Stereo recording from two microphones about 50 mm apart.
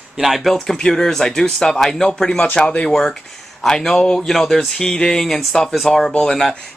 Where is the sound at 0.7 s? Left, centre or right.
Centre.